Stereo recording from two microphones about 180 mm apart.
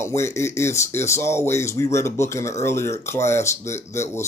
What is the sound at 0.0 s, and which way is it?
Speech, 15° left (ahead or behind).